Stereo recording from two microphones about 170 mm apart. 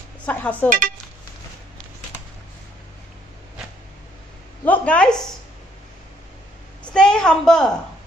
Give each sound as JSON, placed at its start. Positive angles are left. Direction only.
{"t": 0.2, "sound": "speech", "side_deg": 10}
{"t": 0.7, "sound": "speech", "side_deg": -55}
{"t": 4.6, "sound": "a woman's voice", "side_deg": 10}
{"t": 6.8, "sound": "a sound", "side_deg": 5}